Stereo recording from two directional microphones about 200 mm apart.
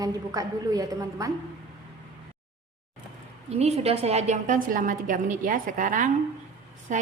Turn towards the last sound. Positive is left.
turn(degrees=-40)  # may be behind; listen again after turning